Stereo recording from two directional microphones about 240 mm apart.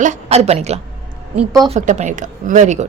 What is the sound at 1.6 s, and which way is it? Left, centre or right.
Speech, right.